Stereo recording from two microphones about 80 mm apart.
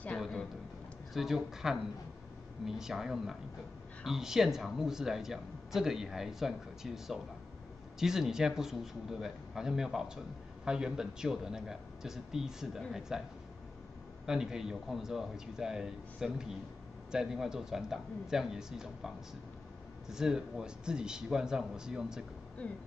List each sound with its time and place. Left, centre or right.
0.2 s a sound: centre
1.1 s a man's voice: centre
22.6 s speech: centre